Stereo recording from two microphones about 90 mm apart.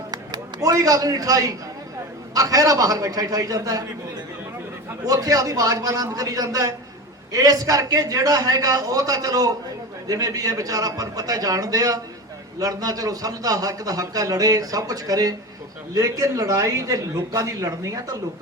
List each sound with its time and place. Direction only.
0.1 s a sound: 45° right (ahead or behind)
2.3 s a man's voice: 40° right (ahead or behind)
5.0 s a man's voice: 40° right (ahead or behind)